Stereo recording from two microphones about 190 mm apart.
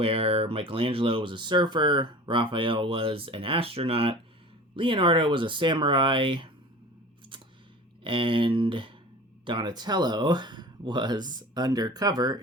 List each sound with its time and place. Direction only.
0.0 s speech: 30° right (ahead or behind)
8.0 s speech: 25° right (ahead or behind)